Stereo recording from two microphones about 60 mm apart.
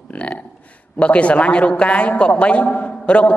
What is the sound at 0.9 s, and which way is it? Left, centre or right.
A man's voice, left.